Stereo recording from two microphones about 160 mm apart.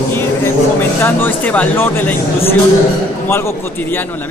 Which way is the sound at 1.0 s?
10° left (ahead or behind).